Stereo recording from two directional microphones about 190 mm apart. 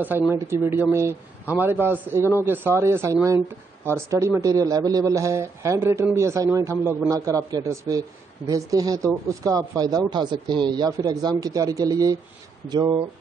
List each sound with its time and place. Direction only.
0.3 s a man's voice: 10° right (ahead or behind)